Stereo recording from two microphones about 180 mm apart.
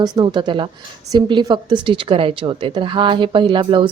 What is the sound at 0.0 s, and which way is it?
A woman's voice, 25° right (ahead or behind).